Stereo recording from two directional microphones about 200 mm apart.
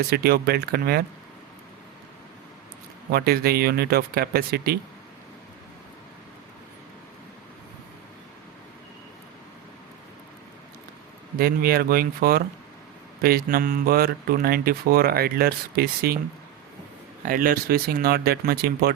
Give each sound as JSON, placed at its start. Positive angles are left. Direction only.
{"t": 0.1, "sound": "speech", "side_deg": -50}
{"t": 3.1, "sound": "speech", "side_deg": -50}
{"t": 11.3, "sound": "speech", "side_deg": -50}
{"t": 17.2, "sound": "speech", "side_deg": -45}